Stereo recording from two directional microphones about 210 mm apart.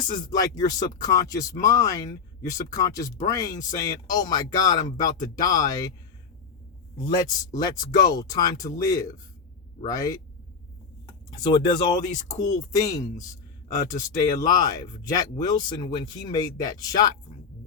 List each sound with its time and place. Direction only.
0.1 s speech: 20° left (ahead or behind)
7.0 s speech: 20° left (ahead or behind)
11.3 s speech: 20° left (ahead or behind)
14.4 s speech: 20° left (ahead or behind)